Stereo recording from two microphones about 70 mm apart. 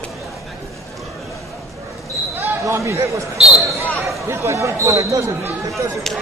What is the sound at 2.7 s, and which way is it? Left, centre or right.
Speech, right.